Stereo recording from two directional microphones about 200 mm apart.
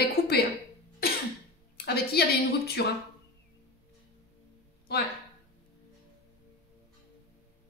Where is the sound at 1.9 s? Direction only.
50° left (ahead or behind).